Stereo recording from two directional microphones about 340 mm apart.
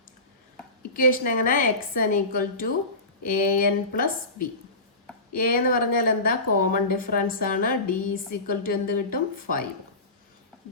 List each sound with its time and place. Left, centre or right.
0.8 s a woman's voice: left